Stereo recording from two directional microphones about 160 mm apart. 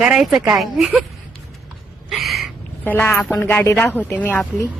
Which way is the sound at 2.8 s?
10° left (ahead or behind).